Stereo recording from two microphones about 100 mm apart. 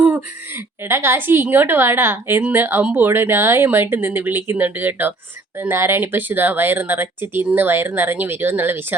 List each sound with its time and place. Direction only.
0.9 s a woman's voice: 25° right (ahead or behind)